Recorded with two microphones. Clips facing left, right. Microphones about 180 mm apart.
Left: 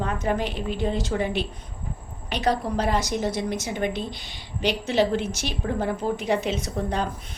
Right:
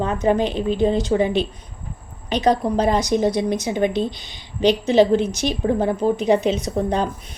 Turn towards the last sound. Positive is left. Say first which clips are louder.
# right 6 dB
turn(degrees=-20)  # may be behind; listen again after turning